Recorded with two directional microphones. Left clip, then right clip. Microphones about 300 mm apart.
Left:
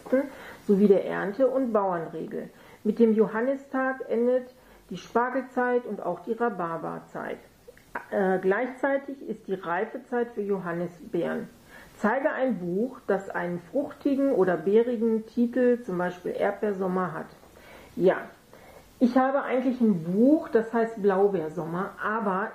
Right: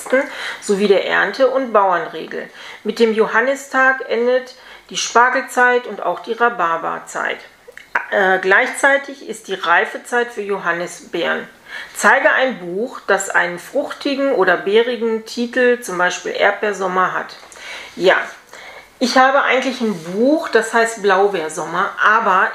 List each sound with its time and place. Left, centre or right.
0.1 s speech: centre
20.2 s speech: right
20.4 s speech: centre